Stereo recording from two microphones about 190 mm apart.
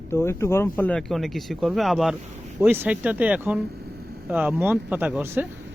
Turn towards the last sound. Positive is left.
turn(degrees=-10)  # may be behind; listen again after turning